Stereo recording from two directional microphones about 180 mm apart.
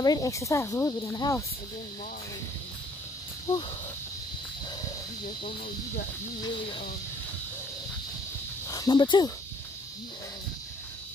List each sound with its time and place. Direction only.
0.0 s speech: 20° left (ahead or behind)
3.5 s speech: 15° left (ahead or behind)
8.6 s speech: 20° left (ahead or behind)